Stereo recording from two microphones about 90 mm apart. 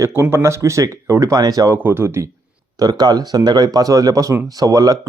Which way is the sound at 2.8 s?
50° right (ahead or behind).